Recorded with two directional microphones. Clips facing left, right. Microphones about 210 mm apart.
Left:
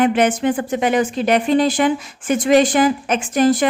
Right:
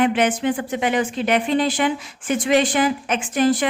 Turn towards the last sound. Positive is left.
turn(degrees=40)  # may be behind; listen again after turning